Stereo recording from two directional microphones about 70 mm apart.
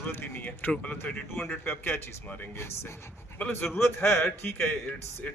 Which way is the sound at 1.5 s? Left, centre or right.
Left.